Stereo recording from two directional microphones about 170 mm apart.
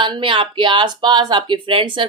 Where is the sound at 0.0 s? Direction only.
30° right (ahead or behind).